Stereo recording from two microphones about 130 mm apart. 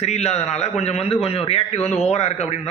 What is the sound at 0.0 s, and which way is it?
A man's voice, 55° left (ahead or behind).